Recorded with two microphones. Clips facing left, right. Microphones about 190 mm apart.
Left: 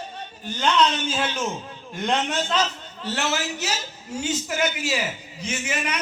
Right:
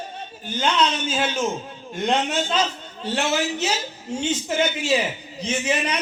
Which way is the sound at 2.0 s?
25° right (ahead or behind).